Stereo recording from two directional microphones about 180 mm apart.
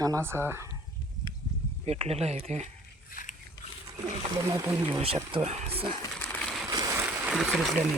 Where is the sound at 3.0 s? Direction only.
50° left (ahead or behind).